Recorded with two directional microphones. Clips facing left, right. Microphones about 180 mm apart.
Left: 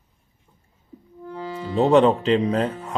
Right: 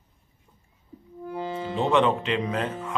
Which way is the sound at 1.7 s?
40° left (ahead or behind).